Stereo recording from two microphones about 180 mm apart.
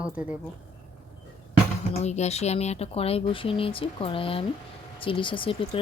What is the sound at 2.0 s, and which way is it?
Speech, 40° left (ahead or behind).